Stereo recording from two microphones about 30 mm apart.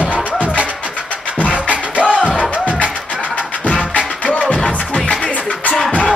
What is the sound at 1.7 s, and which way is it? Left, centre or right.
Music, right.